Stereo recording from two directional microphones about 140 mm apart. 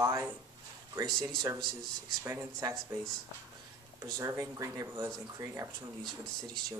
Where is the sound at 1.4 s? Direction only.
30° right (ahead or behind).